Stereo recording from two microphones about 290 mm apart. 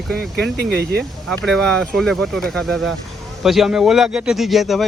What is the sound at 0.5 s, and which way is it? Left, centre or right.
Speech, right.